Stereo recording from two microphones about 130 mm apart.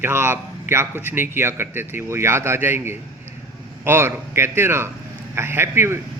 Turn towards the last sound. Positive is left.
turn(degrees=-20)  # may be behind; listen again after turning